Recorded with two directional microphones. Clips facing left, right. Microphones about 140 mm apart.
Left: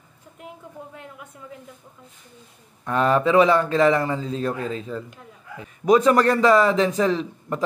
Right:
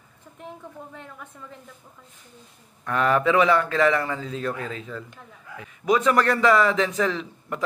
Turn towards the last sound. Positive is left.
turn(degrees=30)  # may be behind; listen again after turning